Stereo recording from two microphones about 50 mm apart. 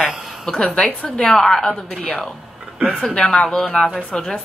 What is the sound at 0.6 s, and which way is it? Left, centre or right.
Speech, left.